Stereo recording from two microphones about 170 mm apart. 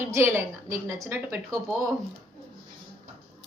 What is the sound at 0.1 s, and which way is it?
A woman's voice, 15° right (ahead or behind).